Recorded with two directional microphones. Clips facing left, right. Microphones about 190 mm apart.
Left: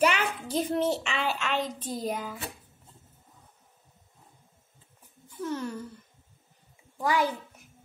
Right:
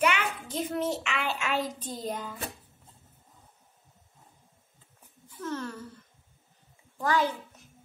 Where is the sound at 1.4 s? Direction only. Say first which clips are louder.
Even; 5° right (ahead or behind).